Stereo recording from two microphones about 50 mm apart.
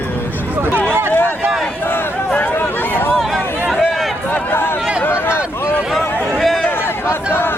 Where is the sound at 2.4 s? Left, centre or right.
Left.